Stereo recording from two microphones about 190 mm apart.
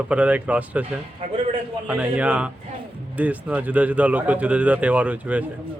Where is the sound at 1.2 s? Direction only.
35° right (ahead or behind).